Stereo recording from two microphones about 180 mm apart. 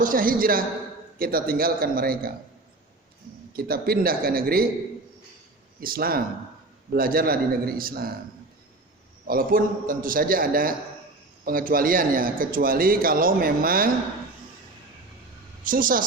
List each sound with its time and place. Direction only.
0.0 s a man's voice: 50° right (ahead or behind)
3.5 s speech: 55° right (ahead or behind)
5.8 s speech: 55° right (ahead or behind)
9.2 s a man's voice: 50° right (ahead or behind)
15.6 s a man's voice: 50° right (ahead or behind)